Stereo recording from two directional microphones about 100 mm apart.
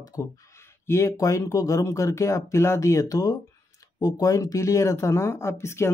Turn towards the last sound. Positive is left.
turn(degrees=25)  # may be behind; listen again after turning